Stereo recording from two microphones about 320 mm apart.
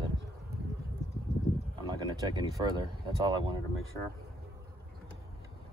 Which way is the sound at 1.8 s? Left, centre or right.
Centre.